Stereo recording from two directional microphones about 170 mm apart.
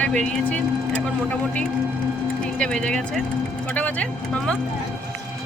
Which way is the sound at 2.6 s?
5° left (ahead or behind).